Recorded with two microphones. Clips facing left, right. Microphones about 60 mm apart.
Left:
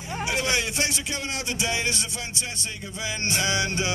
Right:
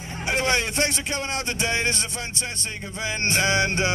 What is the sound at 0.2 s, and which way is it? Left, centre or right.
Speech, right.